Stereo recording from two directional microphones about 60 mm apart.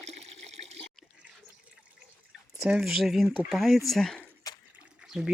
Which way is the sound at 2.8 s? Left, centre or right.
Centre.